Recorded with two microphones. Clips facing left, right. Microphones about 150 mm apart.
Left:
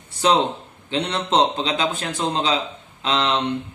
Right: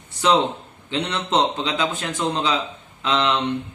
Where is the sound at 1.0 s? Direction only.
30° left (ahead or behind).